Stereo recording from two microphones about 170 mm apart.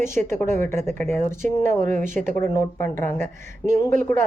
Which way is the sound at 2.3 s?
15° left (ahead or behind).